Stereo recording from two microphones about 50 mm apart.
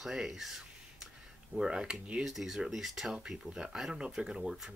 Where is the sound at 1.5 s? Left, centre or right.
Centre.